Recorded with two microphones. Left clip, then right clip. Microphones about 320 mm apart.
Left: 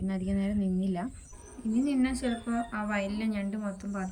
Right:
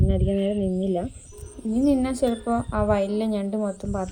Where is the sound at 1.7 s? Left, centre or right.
Centre.